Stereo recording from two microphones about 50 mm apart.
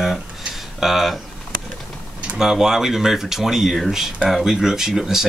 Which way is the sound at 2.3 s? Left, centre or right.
Centre.